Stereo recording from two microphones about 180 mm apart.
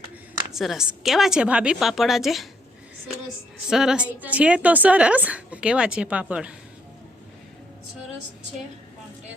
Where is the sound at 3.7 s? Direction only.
5° right (ahead or behind).